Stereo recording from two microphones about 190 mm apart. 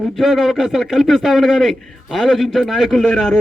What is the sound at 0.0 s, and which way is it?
A man's voice, centre (ahead or behind).